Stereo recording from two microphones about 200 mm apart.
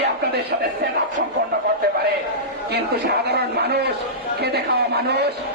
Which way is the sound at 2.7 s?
55° right (ahead or behind).